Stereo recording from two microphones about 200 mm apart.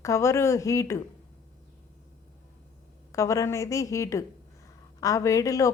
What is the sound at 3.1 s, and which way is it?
A man's voice, 15° left (ahead or behind).